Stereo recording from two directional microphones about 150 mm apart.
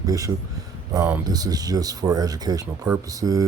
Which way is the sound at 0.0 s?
25° right (ahead or behind).